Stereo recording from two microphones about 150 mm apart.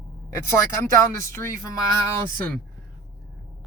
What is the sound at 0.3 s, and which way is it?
Speech, 20° left (ahead or behind).